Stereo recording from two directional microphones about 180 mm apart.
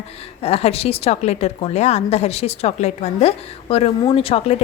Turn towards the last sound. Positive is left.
turn(degrees=30)  # may be behind; listen again after turning